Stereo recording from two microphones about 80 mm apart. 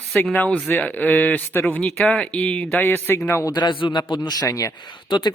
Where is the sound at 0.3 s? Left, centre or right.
Centre.